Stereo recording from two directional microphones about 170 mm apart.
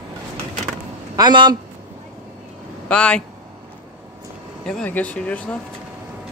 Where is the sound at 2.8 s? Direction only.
5° left (ahead or behind).